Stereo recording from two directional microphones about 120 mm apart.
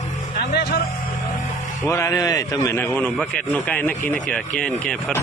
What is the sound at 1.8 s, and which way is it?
A man's voice, 25° left (ahead or behind).